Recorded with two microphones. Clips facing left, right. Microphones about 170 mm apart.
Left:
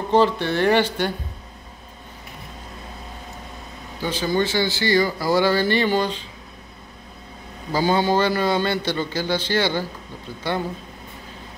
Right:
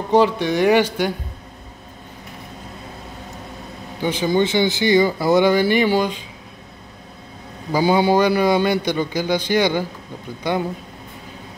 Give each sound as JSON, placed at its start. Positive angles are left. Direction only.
{"t": 0.1, "sound": "speech", "side_deg": -15}
{"t": 4.0, "sound": "speech", "side_deg": -20}
{"t": 7.7, "sound": "speech", "side_deg": -15}